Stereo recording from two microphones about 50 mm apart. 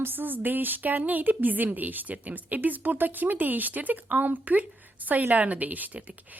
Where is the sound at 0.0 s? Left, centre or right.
Right.